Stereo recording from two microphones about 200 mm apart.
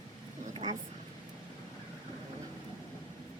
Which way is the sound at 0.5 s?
30° right (ahead or behind).